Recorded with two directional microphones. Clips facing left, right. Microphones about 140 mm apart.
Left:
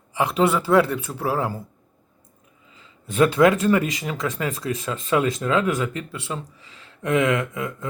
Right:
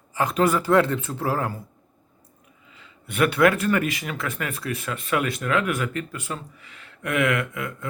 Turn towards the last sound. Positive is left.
turn(degrees=25)  # may be behind; listen again after turning